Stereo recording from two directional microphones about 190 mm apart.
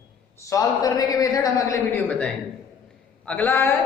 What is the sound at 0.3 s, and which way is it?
A woman's voice, 20° left (ahead or behind).